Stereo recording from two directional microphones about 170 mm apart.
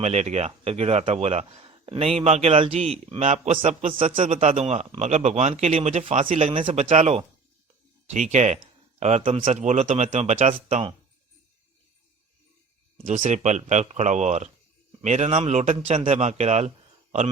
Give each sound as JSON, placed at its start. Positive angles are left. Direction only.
{"t": 0.0, "sound": "a man's voice", "side_deg": -40}
{"t": 13.1, "sound": "a man's voice", "side_deg": -45}